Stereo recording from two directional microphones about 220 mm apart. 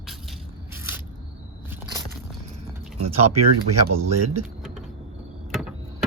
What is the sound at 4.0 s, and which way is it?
Speech, 90° right.